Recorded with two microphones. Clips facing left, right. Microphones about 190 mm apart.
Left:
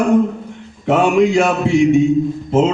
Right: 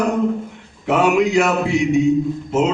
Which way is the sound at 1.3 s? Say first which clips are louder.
Left 2 dB; 30° left (ahead or behind).